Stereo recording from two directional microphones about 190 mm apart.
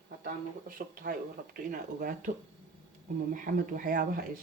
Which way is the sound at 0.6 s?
45° right (ahead or behind).